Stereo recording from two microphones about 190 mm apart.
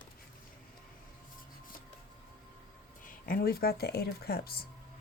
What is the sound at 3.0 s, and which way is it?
Speech, 50° left (ahead or behind).